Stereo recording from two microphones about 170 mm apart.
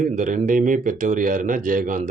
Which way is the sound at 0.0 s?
50° right (ahead or behind).